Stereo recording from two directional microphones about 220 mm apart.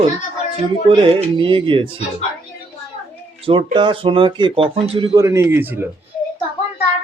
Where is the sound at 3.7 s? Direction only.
20° right (ahead or behind).